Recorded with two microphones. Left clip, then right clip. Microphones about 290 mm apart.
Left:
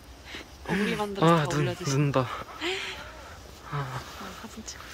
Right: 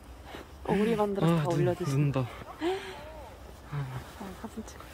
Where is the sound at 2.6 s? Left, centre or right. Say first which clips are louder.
Even; right.